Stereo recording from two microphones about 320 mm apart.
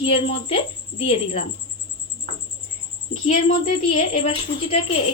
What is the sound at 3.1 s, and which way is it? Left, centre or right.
A woman's voice, left.